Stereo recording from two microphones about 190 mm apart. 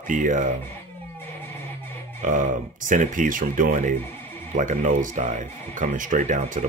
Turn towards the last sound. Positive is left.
turn(degrees=-40)  # may be behind; listen again after turning